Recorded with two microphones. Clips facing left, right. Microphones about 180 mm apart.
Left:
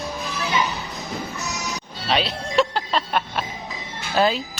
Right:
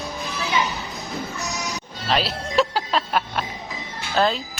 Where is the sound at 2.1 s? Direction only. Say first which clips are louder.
Even; centre (ahead or behind).